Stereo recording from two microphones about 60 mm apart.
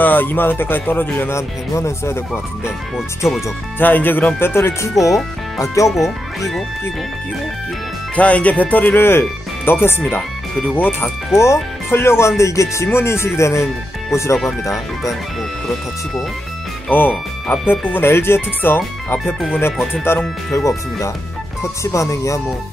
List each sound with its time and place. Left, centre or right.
0.0 s speech: left
1.3 s speech: left
3.8 s speech: left
4.4 s speech: left
5.0 s speech: left
5.9 s speech: centre
8.2 s speech: left
11.3 s speech: left
12.4 s speech: left
16.9 s speech: left
20.1 s speech: left
20.5 s speech: left